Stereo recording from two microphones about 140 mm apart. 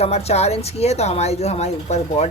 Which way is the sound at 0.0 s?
50° left (ahead or behind).